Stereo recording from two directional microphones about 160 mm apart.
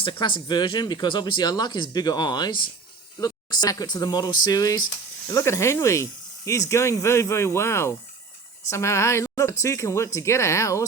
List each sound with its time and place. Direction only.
0.0 s speech: 30° left (ahead or behind)